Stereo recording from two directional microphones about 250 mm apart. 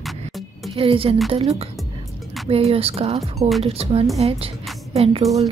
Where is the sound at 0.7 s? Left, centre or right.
Right.